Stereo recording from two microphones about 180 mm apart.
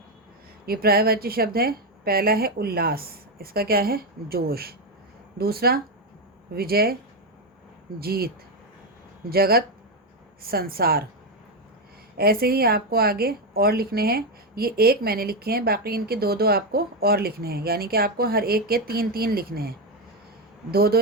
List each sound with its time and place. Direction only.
0.6 s a woman's voice: 55° right (ahead or behind)
7.9 s a woman's voice: 60° right (ahead or behind)
9.3 s a woman's voice: 55° right (ahead or behind)
12.1 s a woman's voice: 55° right (ahead or behind)